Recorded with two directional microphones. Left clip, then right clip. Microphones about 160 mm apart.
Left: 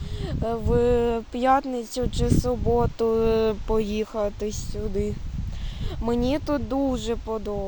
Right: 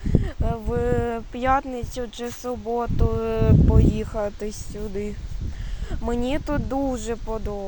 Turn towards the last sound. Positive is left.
turn(degrees=20)  # may be behind; listen again after turning